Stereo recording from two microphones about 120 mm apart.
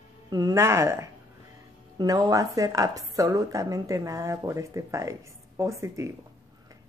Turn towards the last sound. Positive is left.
turn(degrees=-25)  # may be behind; listen again after turning